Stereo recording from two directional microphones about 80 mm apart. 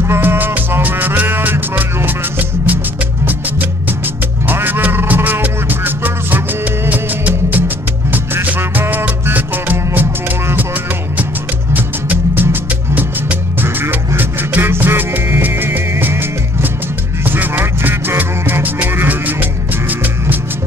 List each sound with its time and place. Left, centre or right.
0.0 s music: right
4.5 s music: right
11.7 s music: right